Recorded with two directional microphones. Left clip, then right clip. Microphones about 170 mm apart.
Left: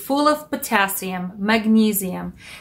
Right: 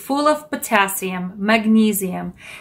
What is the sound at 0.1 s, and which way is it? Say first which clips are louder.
Speech: right 1 dB; 30° right (ahead or behind).